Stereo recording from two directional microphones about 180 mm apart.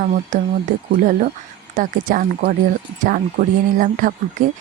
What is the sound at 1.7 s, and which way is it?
Speech, 50° right (ahead or behind).